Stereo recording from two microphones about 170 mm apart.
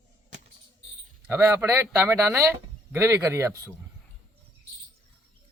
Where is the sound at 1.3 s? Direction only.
15° right (ahead or behind).